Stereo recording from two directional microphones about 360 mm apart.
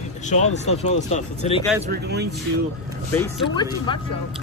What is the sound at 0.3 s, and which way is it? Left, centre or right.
Speech, centre.